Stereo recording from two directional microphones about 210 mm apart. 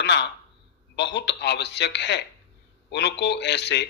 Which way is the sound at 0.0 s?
55° left (ahead or behind).